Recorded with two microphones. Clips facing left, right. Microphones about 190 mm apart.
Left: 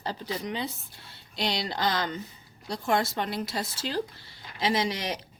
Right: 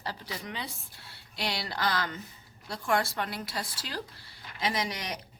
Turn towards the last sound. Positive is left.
turn(degrees=25)  # may be behind; listen again after turning